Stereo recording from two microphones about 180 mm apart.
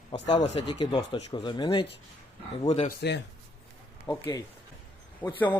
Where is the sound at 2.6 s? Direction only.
35° left (ahead or behind).